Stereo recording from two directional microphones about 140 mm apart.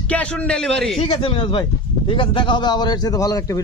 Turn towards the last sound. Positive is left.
turn(degrees=25)  # may be behind; listen again after turning